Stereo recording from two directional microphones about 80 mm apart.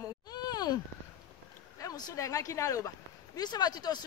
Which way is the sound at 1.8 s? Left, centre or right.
Left.